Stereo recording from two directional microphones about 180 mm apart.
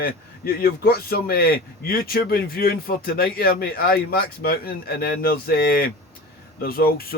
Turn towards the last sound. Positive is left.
turn(degrees=55)  # may be behind; listen again after turning